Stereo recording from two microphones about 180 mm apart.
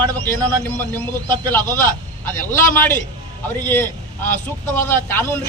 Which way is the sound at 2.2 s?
10° left (ahead or behind).